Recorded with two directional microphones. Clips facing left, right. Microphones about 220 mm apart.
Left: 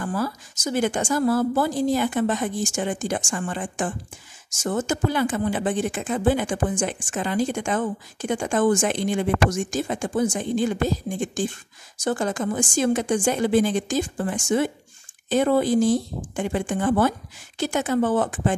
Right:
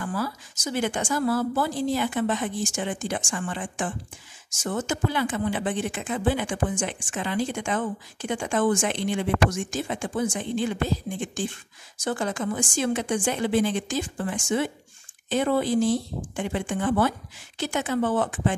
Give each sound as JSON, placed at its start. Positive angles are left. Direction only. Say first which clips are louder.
{"t": 0.0, "sound": "speech", "louder": "left 3 dB", "side_deg": 45}